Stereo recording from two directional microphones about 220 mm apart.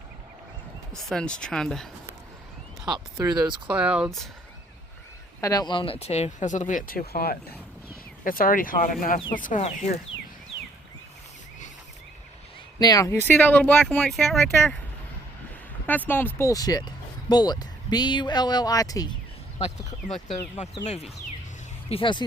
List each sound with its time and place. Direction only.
0.9 s speech: 5° left (ahead or behind)
3.3 s speech: 20° right (ahead or behind)
3.7 s speech: 5° right (ahead or behind)
5.4 s speech: 15° left (ahead or behind)
12.8 s speech: 15° left (ahead or behind)
15.9 s speech: 10° left (ahead or behind)
20.8 s speech: 30° left (ahead or behind)